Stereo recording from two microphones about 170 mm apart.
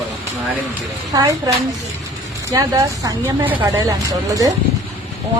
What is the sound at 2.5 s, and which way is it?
Speech, 20° right (ahead or behind).